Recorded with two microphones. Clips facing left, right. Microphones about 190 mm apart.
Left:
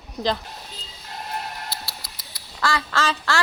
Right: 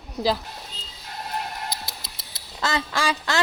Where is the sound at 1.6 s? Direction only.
15° right (ahead or behind).